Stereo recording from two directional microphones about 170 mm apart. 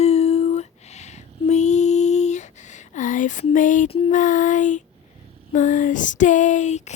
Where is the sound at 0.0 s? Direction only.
40° left (ahead or behind).